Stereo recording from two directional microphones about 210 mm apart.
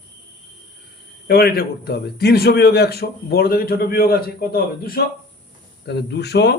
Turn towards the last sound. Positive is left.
turn(degrees=50)  # may be behind; listen again after turning